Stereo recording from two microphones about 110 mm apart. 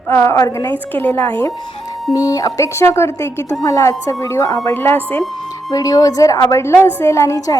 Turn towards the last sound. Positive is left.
turn(degrees=30)  # may be behind; listen again after turning